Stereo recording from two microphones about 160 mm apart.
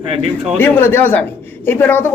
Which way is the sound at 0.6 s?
15° left (ahead or behind).